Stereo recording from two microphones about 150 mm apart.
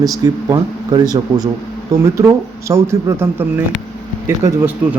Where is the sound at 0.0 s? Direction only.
25° right (ahead or behind).